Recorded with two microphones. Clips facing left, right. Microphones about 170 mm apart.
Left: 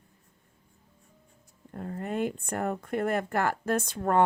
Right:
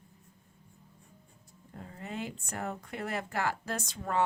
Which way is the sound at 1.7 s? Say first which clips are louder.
Left 8 dB; 55° left (ahead or behind).